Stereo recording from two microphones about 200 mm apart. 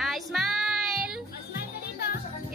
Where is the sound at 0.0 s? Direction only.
Centre (ahead or behind).